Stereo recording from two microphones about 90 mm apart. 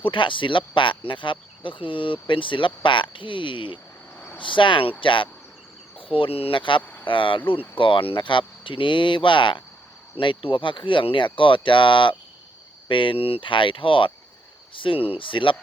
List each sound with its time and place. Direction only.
0.0 s speech: 65° left (ahead or behind)
6.0 s speech: 85° left; by 15.5 s 70° left (ahead or behind)